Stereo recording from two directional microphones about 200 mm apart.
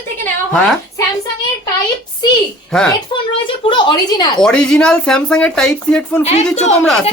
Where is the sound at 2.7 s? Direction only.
Centre (ahead or behind).